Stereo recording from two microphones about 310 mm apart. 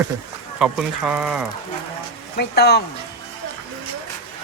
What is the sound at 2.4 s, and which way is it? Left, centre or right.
Speech, left.